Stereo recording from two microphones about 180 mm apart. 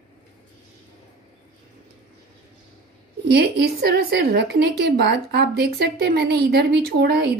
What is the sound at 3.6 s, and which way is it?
A woman's voice, 65° right (ahead or behind).